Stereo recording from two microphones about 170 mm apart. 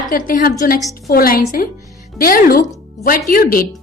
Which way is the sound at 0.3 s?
55° left (ahead or behind).